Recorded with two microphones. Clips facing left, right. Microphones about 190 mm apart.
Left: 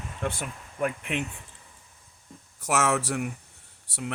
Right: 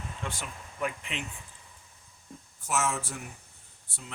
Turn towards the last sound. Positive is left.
turn(degrees=80)